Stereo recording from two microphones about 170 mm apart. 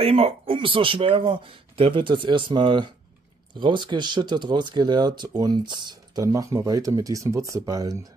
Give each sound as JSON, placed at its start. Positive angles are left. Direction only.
{"t": 0.0, "sound": "speech", "side_deg": -35}